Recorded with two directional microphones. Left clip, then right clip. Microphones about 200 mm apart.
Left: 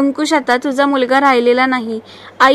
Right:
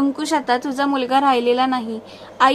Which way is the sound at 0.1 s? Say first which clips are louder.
Left 5 dB; 25° left (ahead or behind).